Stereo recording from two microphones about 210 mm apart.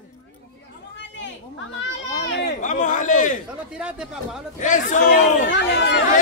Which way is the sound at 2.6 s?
35° left (ahead or behind).